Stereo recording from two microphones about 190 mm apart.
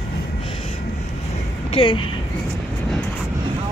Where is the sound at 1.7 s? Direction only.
30° left (ahead or behind).